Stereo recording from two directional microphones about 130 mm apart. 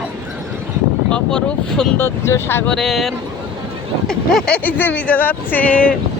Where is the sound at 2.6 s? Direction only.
5° left (ahead or behind).